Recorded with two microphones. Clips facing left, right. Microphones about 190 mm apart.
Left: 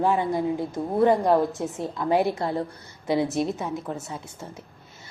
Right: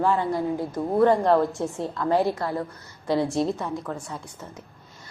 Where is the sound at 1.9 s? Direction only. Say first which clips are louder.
Even; 15° left (ahead or behind).